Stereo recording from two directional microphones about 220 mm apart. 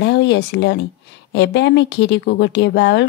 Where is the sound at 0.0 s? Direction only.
55° left (ahead or behind).